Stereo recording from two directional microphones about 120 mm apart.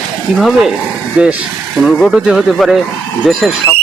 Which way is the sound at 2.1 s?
5° right (ahead or behind).